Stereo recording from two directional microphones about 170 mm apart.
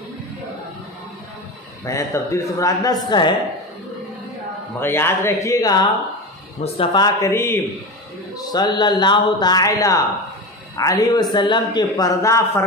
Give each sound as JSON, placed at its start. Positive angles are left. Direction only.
{"t": 1.9, "sound": "speech", "side_deg": 15}
{"t": 4.7, "sound": "speech", "side_deg": 15}